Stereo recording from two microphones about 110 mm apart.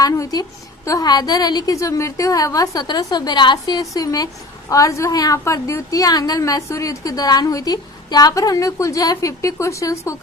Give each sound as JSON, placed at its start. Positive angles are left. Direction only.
{"t": 0.0, "sound": "a woman's voice", "side_deg": 35}